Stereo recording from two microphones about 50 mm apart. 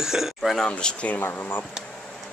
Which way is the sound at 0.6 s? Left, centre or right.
Left.